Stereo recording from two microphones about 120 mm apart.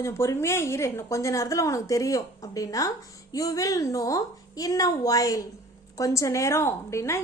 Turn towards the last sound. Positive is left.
turn(degrees=25)  # may be behind; listen again after turning